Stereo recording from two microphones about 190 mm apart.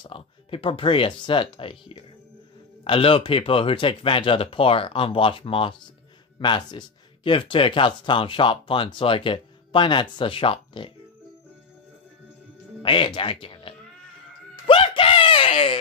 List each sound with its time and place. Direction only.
0.0 s speech: 25° left (ahead or behind)
12.8 s speech: 25° left (ahead or behind)
14.5 s a sound: 25° left (ahead or behind)